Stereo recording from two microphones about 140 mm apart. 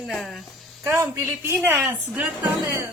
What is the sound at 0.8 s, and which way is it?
Speech, 20° right (ahead or behind).